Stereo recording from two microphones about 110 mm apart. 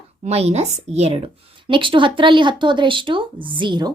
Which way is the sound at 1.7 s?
50° right (ahead or behind).